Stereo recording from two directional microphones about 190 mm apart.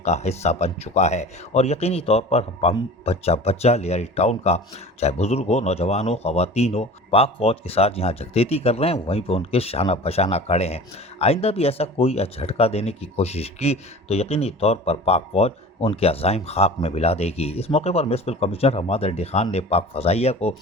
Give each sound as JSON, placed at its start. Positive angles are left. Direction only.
{"t": 0.0, "sound": "speech", "side_deg": 35}